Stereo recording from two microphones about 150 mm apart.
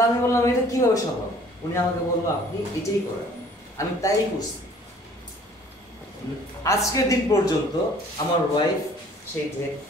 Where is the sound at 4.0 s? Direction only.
20° left (ahead or behind).